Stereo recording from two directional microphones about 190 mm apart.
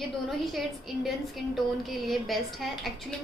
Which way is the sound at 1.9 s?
Centre (ahead or behind).